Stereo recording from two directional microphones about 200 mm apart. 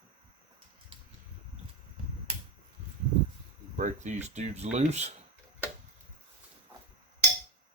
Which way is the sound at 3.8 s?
35° right (ahead or behind).